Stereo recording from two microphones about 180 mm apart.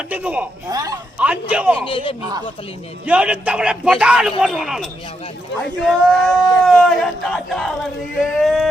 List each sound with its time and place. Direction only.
0.1 s a man's voice: 10° right (ahead or behind)
0.7 s a woman's voice: 20° right (ahead or behind)
1.2 s a man's voice: 10° right (ahead or behind)
1.8 s a man's voice: 30° left (ahead or behind)
3.1 s speech: 5° right (ahead or behind)